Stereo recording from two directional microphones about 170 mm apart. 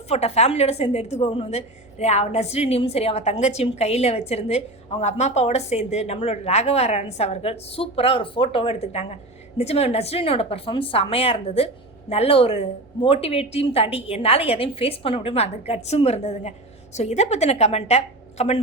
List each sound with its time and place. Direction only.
0.1 s a woman's voice: 40° left (ahead or behind)